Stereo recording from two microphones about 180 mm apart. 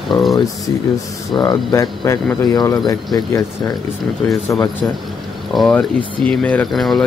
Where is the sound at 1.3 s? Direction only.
20° left (ahead or behind).